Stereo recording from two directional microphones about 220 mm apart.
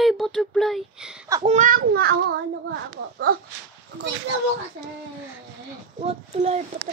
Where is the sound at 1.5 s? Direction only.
35° right (ahead or behind).